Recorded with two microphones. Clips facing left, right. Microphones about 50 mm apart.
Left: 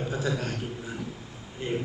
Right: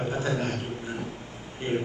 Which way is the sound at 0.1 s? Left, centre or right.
Right.